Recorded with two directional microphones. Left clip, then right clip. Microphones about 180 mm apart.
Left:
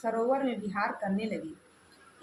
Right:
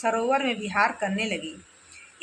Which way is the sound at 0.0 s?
25° right (ahead or behind).